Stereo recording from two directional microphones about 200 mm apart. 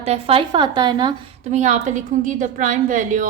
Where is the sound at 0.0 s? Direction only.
30° right (ahead or behind).